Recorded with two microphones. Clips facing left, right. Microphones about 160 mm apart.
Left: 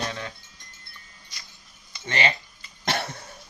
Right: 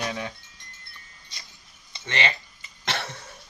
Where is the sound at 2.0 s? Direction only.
35° left (ahead or behind).